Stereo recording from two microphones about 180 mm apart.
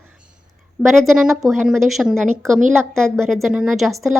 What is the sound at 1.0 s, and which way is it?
A woman's voice, centre (ahead or behind).